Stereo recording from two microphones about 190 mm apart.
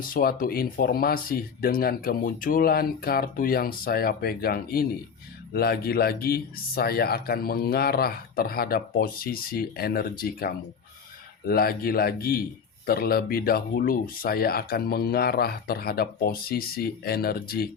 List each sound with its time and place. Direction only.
0.0 s a man's voice: 50° left (ahead or behind)